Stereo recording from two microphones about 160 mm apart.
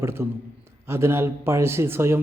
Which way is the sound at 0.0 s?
15° right (ahead or behind).